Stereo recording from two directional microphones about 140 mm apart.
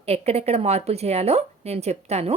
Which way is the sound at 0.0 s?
45° right (ahead or behind).